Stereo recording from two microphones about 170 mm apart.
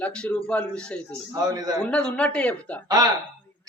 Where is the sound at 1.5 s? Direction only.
25° right (ahead or behind).